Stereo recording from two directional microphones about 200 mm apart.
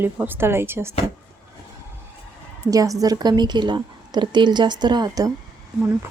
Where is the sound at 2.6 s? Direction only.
15° right (ahead or behind).